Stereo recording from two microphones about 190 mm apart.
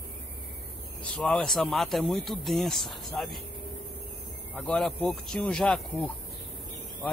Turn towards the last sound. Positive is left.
turn(degrees=5)  # may be behind; listen again after turning